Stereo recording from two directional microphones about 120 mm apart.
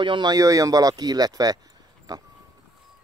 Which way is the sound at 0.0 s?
40° right (ahead or behind).